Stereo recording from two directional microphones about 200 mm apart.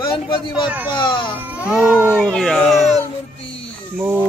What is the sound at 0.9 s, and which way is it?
Speech, 25° left (ahead or behind).